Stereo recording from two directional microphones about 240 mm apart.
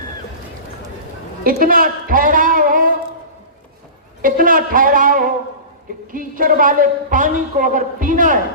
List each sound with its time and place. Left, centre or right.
1.5 s a man's voice: right
4.2 s a woman's voice: right